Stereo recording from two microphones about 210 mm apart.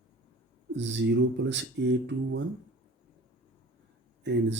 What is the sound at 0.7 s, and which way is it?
Speech, 60° right (ahead or behind).